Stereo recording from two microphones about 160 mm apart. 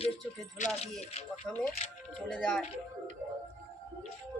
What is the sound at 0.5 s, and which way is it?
Speech, 50° left (ahead or behind).